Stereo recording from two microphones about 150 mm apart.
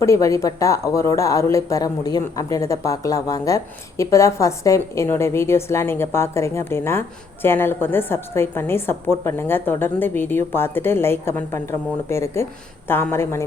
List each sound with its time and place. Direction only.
0.0 s a woman's voice: 20° left (ahead or behind)